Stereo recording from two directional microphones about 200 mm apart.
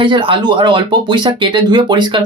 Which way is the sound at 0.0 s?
25° right (ahead or behind).